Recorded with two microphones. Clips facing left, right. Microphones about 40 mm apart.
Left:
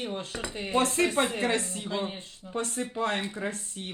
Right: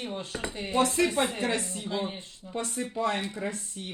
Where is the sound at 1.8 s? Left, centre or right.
Centre.